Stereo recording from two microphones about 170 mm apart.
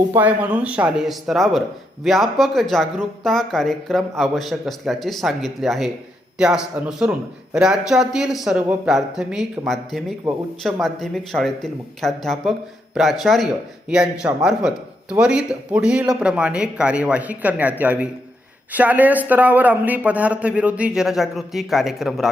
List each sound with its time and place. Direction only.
0.1 s a man's voice: 10° right (ahead or behind)